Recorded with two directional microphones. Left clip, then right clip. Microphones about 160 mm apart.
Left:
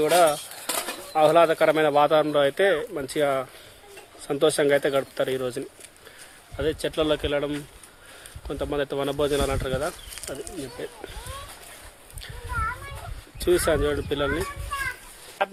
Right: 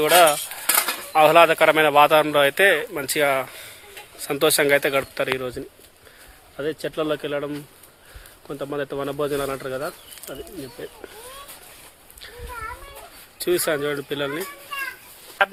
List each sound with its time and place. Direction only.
0.0 s speech: centre (ahead or behind)
13.4 s speech: 20° left (ahead or behind)